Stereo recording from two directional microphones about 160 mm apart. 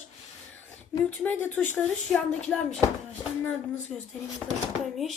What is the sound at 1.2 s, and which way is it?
Speech, 10° left (ahead or behind).